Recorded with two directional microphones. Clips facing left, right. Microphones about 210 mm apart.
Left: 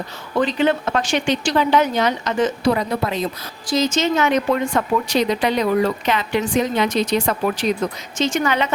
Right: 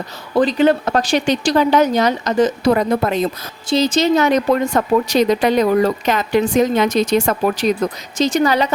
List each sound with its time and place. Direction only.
0.3 s speech: 40° right (ahead or behind)
3.7 s speech: 35° right (ahead or behind)